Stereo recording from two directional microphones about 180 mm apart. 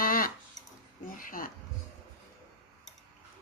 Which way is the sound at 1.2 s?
50° left (ahead or behind).